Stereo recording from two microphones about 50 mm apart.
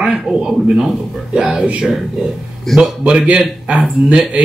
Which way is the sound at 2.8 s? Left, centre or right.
Centre.